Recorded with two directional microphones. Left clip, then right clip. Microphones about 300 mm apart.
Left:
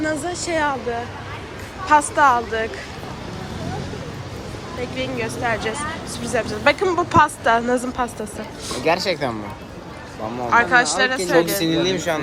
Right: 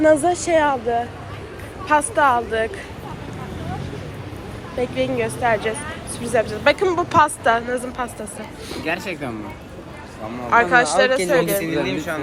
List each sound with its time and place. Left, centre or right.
0.0 s speech: centre
4.8 s speech: centre
8.8 s speech: left
10.5 s speech: centre
11.7 s speech: left